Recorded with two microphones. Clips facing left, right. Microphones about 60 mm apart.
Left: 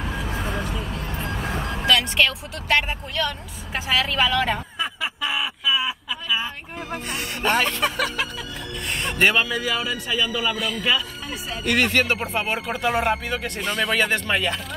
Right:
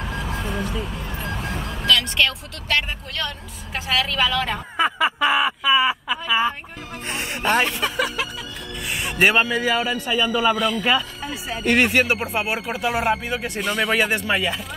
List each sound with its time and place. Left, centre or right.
0.0 s vehicle: centre
1.5 s speech: left; by 4.6 s centre
4.7 s speech: right
7.4 s speech: centre
8.8 s a sound: centre
9.3 s a man's voice: right
11.9 s speech: centre